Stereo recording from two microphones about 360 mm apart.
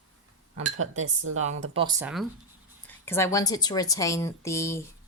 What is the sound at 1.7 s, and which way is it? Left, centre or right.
Speech, centre.